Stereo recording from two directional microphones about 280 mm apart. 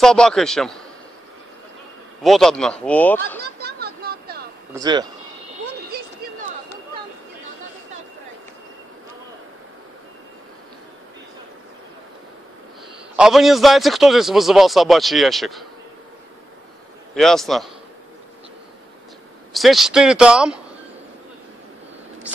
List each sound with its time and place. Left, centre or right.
0.0 s a man's voice: centre
2.2 s a man's voice: centre
3.6 s a sound: right
4.7 s a man's voice: centre
5.9 s a sound: right
13.1 s a man's voice: centre
17.1 s a man's voice: centre
19.5 s a man's voice: centre